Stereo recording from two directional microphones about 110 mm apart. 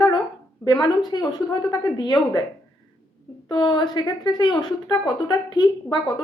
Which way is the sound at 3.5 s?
45° left (ahead or behind).